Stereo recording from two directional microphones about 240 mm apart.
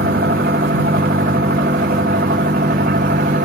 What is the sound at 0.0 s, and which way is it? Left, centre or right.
Vehicle, right.